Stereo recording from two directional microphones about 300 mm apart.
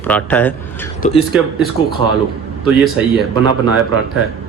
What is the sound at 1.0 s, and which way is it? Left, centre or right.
Speech, centre.